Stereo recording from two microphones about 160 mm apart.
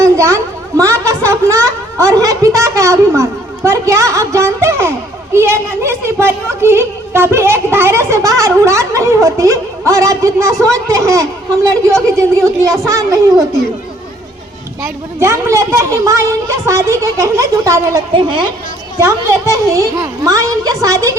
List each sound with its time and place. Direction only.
0.0 s a sound: 20° right (ahead or behind)
0.8 s a woman's voice: 20° right (ahead or behind)
15.2 s a woman's voice: 20° right (ahead or behind)
18.1 s a woman's voice: 30° right (ahead or behind)